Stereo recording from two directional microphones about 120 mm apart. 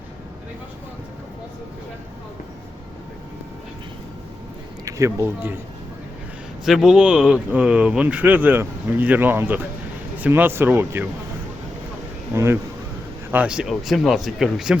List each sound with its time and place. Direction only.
4.9 s speech: 25° right (ahead or behind)
6.7 s speech: 5° right (ahead or behind)
12.3 s speech: 20° right (ahead or behind)
13.3 s speech: 10° right (ahead or behind)